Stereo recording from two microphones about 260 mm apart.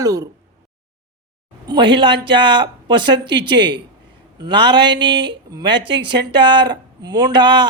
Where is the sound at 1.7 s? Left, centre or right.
Centre.